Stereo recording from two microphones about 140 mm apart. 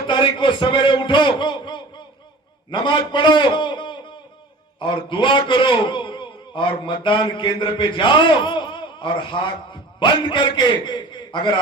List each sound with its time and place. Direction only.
0.1 s a man's voice: 35° left (ahead or behind)